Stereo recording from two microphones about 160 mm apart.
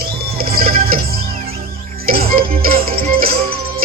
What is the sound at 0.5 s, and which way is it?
Music, 65° right (ahead or behind).